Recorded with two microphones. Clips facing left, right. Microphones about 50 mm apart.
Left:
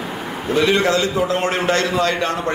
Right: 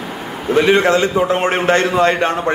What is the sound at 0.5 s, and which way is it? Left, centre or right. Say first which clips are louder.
A man's voice: right 4 dB; right.